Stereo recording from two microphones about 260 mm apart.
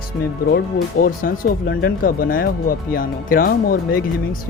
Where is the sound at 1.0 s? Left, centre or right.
Left.